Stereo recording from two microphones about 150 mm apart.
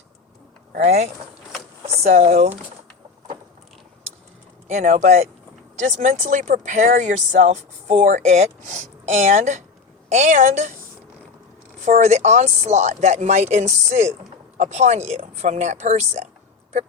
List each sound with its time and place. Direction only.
0.7 s speech: 90° right
2.0 s speech: 50° right (ahead or behind)
4.7 s speech: 55° right (ahead or behind)
11.9 s speech: 50° right (ahead or behind)